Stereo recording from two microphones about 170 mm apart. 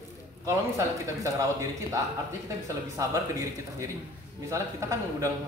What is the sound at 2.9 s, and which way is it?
A man's voice, 20° right (ahead or behind).